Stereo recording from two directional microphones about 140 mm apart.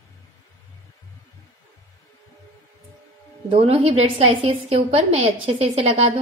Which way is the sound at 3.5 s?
45° right (ahead or behind).